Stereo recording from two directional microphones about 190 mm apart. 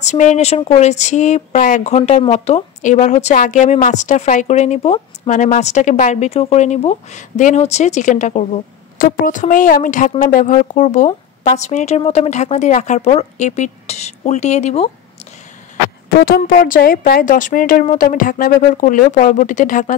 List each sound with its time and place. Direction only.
0.0 s speech: 40° left (ahead or behind)
16.2 s a woman's voice: 50° left (ahead or behind)